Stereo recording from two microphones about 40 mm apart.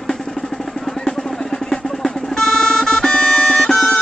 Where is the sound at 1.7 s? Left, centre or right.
Centre.